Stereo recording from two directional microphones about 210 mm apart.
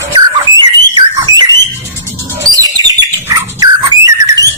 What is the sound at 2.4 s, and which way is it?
Bird, 20° right (ahead or behind).